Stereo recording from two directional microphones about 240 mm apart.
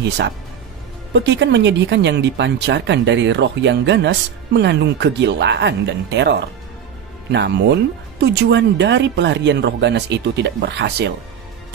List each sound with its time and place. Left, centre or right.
1.1 s speech: right